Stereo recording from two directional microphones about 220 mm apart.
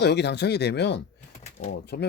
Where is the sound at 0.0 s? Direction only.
50° left (ahead or behind).